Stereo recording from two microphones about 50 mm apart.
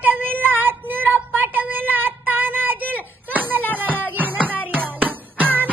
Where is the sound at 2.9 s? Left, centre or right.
Right.